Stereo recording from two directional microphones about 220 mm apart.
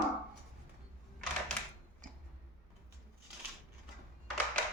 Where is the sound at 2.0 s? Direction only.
35° right (ahead or behind).